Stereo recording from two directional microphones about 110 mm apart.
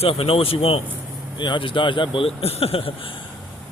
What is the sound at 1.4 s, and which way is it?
Speech, 50° left (ahead or behind).